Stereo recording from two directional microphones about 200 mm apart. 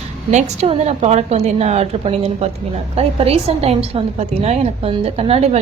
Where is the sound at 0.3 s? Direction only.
35° right (ahead or behind).